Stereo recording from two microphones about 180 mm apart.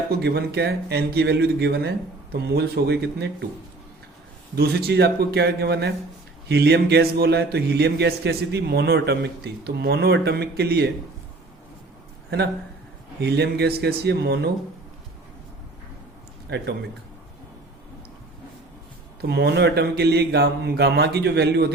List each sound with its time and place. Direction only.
0.1 s a man's voice: 65° right (ahead or behind)
4.5 s a man's voice: 60° right (ahead or behind)
13.2 s a man's voice: 65° right (ahead or behind)
19.2 s a man's voice: 65° right (ahead or behind)